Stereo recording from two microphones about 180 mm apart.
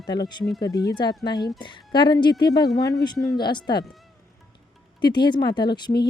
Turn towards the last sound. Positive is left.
turn(degrees=25)  # may be behind; listen again after turning